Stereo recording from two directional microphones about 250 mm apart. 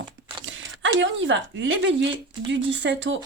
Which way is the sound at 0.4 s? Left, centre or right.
Right.